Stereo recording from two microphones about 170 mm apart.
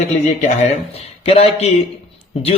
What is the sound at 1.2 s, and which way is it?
Speech, 35° left (ahead or behind).